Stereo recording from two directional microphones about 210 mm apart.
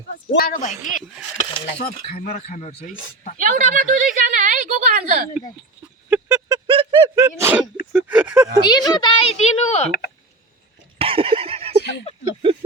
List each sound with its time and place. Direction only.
0.3 s speech: 45° left (ahead or behind)
3.3 s speech: 40° right (ahead or behind)
6.1 s vehicle: 10° right (ahead or behind)
7.2 s speech: 10° right (ahead or behind)
8.6 s a woman's voice: 20° left (ahead or behind)
10.9 s a sound: 25° right (ahead or behind)
12.2 s speech: 25° right (ahead or behind)